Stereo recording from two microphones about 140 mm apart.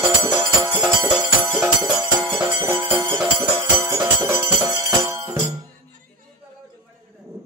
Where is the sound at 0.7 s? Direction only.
5° right (ahead or behind).